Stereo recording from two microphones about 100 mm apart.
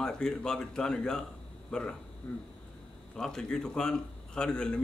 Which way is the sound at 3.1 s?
5° left (ahead or behind).